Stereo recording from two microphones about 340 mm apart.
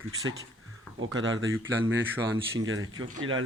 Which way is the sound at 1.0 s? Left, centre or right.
Right.